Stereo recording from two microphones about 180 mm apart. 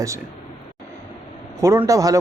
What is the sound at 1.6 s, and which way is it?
Speech, 15° right (ahead or behind).